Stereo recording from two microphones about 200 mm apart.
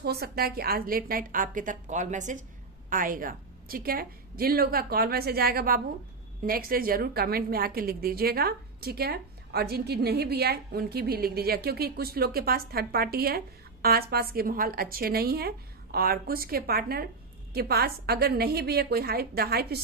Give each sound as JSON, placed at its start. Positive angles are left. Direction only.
{"t": 0.0, "sound": "a woman's voice", "side_deg": -50}